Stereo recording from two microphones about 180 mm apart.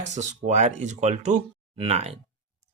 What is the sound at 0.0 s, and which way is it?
Speech, 40° right (ahead or behind).